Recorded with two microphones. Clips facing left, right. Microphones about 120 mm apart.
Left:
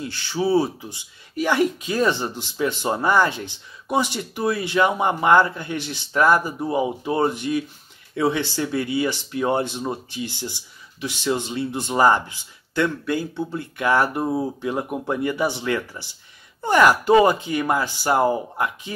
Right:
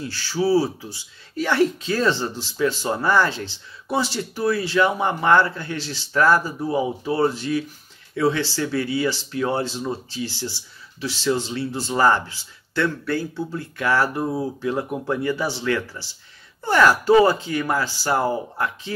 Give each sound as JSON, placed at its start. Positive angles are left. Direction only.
{"t": 0.0, "sound": "speech", "side_deg": 20}